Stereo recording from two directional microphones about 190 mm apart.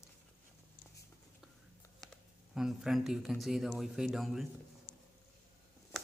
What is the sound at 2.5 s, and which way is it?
Speech, centre (ahead or behind).